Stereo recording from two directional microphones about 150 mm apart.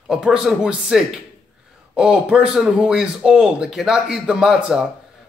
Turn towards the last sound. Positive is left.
turn(degrees=-5)  # may be behind; listen again after turning